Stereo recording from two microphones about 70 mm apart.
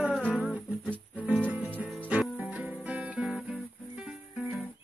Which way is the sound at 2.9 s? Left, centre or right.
Centre.